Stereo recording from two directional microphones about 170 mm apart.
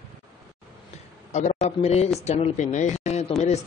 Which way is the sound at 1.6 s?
40° left (ahead or behind).